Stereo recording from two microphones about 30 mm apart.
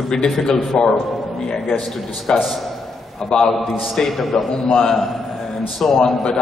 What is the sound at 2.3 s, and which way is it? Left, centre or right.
A man's voice, left.